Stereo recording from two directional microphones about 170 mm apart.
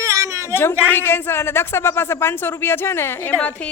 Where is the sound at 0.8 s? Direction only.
10° left (ahead or behind).